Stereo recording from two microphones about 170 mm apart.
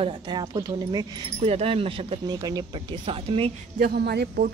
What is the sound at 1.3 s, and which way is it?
Speech, 40° right (ahead or behind).